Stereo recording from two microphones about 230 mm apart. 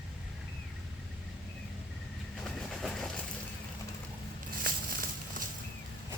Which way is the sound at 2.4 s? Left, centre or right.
Centre.